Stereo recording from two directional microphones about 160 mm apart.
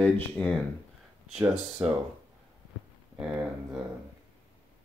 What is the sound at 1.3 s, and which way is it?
Speech, 5° right (ahead or behind).